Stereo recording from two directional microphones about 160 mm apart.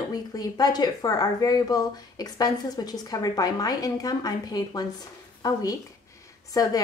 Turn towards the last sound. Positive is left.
turn(degrees=25)  # may be behind; listen again after turning